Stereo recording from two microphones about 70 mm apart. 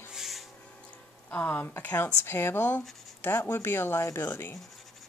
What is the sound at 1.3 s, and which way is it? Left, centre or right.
A woman's voice, left.